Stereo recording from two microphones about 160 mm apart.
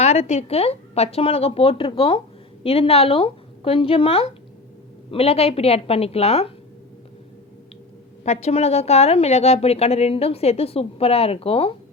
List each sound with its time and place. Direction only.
0.0 s a woman's voice: 40° left (ahead or behind)
8.2 s a woman's voice: 45° left (ahead or behind)